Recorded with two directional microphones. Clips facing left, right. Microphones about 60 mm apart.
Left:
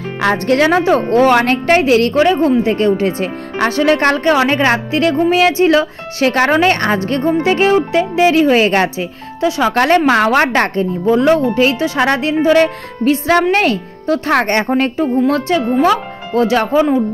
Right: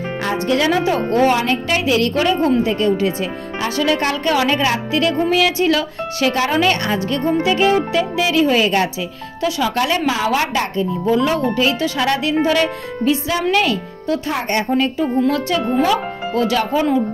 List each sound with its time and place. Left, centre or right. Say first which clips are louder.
0.5 s a woman's voice: left 4 dB; left
4.2 s a woman's voice: left 4 dB; left
12.6 s speech: left 3 dB; left
14.3 s a woman's voice: left 6 dB; left